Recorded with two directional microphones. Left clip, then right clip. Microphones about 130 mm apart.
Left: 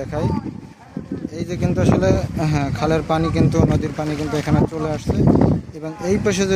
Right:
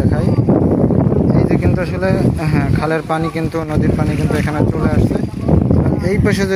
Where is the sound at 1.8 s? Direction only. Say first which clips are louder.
Right 1 dB; 25° left (ahead or behind).